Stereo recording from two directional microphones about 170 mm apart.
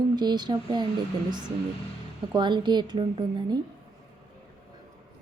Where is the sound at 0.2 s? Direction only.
25° right (ahead or behind).